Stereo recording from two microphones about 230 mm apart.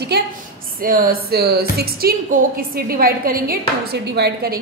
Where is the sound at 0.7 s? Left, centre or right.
Right.